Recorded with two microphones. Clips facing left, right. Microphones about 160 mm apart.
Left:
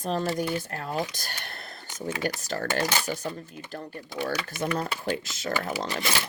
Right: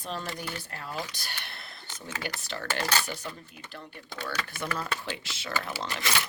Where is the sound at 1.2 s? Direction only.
45° left (ahead or behind).